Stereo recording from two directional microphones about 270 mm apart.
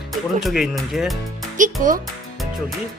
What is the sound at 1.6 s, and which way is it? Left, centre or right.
Speech, right.